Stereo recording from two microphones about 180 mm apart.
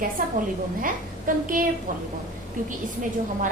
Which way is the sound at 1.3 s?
50° right (ahead or behind).